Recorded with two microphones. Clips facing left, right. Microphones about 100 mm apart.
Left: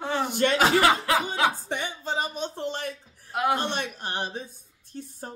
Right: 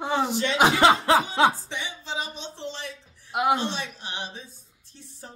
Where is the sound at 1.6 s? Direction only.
50° left (ahead or behind).